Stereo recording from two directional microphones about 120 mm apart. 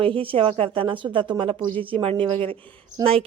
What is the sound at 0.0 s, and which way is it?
Speech, 50° right (ahead or behind).